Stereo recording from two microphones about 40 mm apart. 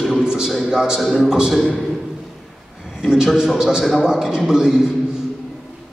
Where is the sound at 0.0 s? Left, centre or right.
Centre.